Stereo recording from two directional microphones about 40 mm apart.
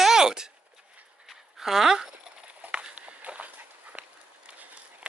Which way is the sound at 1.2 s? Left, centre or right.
Centre.